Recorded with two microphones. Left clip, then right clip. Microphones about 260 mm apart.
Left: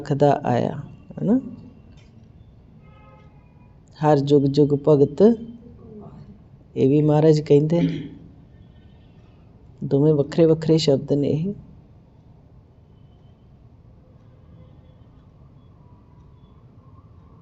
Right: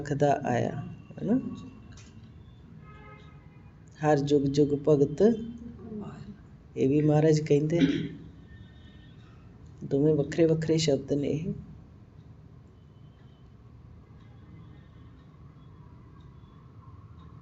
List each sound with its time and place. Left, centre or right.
0.0 s speech: left
3.9 s speech: left
6.7 s speech: left
9.9 s speech: left